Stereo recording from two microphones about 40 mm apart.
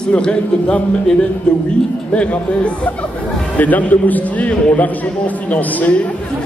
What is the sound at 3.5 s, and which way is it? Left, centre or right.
A man's voice, left.